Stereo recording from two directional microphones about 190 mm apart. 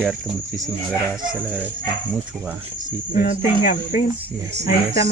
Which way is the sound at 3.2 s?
40° left (ahead or behind).